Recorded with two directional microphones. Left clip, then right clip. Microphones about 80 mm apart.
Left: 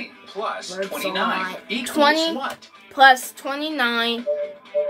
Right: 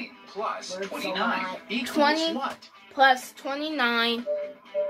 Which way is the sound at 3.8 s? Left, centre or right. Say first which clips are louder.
Left 3 dB; right.